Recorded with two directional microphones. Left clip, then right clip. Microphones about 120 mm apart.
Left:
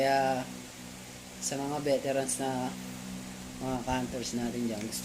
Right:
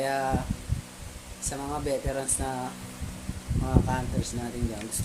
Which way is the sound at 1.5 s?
25° right (ahead or behind).